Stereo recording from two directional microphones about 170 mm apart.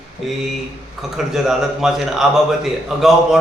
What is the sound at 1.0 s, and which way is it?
A man's voice, centre (ahead or behind).